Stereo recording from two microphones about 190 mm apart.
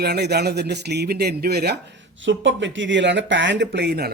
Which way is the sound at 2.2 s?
75° right (ahead or behind).